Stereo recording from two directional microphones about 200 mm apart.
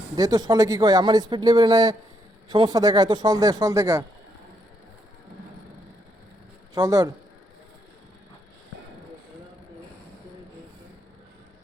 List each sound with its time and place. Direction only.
0.2 s speech: 20° right (ahead or behind)
6.7 s speech: 20° right (ahead or behind)